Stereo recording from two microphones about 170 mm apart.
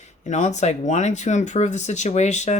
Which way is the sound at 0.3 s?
45° left (ahead or behind).